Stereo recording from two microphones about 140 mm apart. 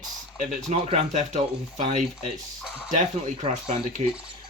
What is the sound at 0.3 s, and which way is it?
Speech, 50° right (ahead or behind).